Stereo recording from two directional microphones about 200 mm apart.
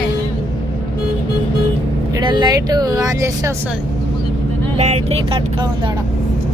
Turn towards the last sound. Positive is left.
turn(degrees=-25)  # may be behind; listen again after turning